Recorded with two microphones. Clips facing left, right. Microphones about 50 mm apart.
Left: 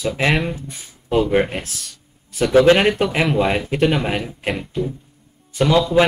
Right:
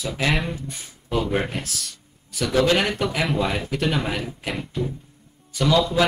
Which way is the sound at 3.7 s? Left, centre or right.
Left.